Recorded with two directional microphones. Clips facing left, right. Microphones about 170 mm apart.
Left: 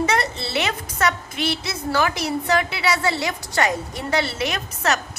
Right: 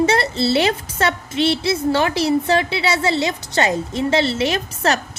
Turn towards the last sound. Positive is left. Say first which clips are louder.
# right 4 dB
turn(degrees=-30)  # may be behind; listen again after turning